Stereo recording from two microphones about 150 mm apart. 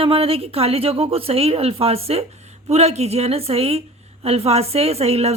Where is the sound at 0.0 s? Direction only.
40° right (ahead or behind).